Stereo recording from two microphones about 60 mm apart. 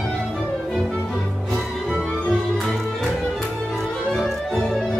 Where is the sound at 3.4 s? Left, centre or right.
Centre.